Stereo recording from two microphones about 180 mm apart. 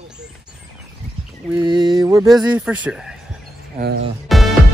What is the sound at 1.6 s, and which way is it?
Mantra, 25° right (ahead or behind).